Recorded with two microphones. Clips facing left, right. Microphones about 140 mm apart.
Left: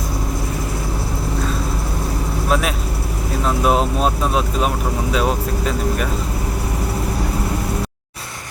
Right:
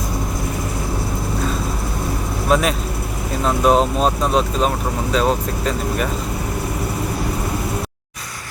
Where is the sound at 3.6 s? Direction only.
5° left (ahead or behind).